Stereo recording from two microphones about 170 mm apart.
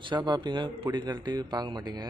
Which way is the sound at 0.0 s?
25° right (ahead or behind).